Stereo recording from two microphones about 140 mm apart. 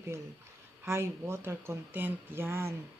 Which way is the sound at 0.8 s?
20° right (ahead or behind).